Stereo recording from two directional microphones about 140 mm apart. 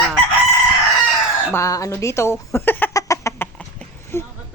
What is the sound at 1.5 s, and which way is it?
Speech, 25° left (ahead or behind).